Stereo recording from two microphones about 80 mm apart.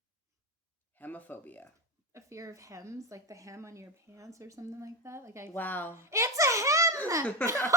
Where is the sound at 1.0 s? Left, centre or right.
Left.